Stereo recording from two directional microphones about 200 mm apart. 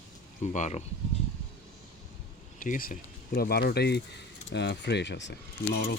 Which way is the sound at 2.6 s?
45° left (ahead or behind).